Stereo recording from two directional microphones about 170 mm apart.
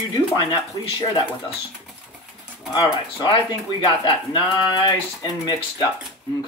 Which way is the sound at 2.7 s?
30° left (ahead or behind).